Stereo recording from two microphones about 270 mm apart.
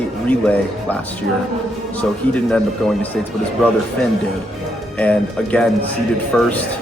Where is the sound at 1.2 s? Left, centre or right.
Right.